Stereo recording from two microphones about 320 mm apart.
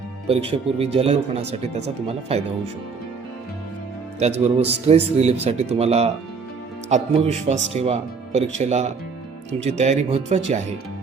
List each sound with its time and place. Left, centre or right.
0.3 s speech: centre
4.2 s speech: centre